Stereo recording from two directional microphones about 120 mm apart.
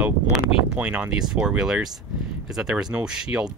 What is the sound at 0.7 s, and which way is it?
Speech, 10° right (ahead or behind).